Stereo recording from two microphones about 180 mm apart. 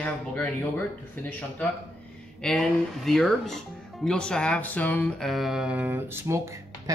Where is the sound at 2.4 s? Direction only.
Centre (ahead or behind).